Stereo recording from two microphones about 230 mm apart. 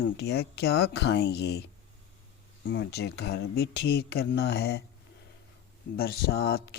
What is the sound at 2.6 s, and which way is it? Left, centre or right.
Speech, left.